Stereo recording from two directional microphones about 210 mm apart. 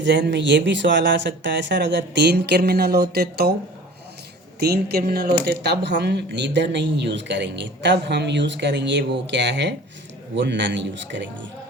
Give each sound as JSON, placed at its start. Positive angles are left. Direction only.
{"t": 0.0, "sound": "speech", "side_deg": -55}
{"t": 4.6, "sound": "speech", "side_deg": -50}